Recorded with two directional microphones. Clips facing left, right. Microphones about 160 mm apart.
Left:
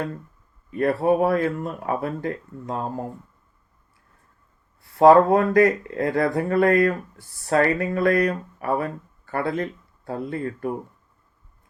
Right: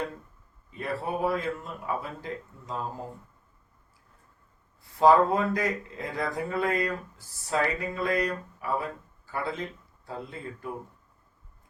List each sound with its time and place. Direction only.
0.7 s speech: 60° left (ahead or behind)
4.8 s speech: 65° left (ahead or behind)